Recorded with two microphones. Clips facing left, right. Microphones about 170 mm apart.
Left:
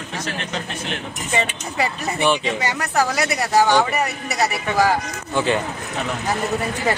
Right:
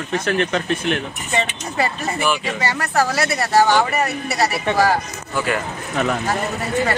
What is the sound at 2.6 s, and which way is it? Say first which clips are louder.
Speech: right 4 dB; 15° left (ahead or behind).